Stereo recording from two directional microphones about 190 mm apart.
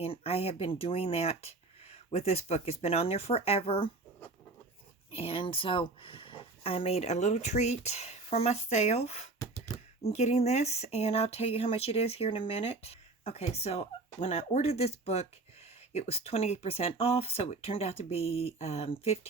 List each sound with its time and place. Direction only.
0.0 s speech: 30° left (ahead or behind)
5.1 s speech: 30° left (ahead or behind)
9.4 s beatboxing: 15° left (ahead or behind)
10.0 s speech: 35° left (ahead or behind)